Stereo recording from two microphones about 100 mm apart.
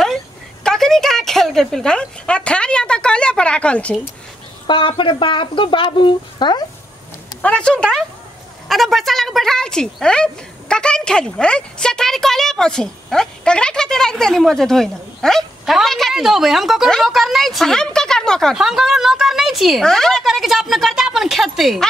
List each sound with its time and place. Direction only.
0.7 s a woman's voice: 5° left (ahead or behind)
4.6 s speech: 55° left (ahead or behind)
7.4 s a woman's voice: 10° left (ahead or behind)